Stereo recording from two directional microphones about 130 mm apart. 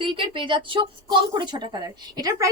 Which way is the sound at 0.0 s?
40° right (ahead or behind).